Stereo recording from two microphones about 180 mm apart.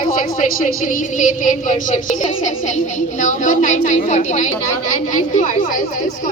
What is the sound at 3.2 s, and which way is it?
A woman's voice, 45° left (ahead or behind).